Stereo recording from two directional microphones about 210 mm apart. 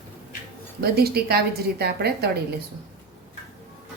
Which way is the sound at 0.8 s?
50° right (ahead or behind).